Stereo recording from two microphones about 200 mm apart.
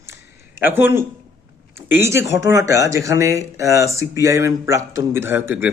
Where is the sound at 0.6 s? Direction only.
10° right (ahead or behind).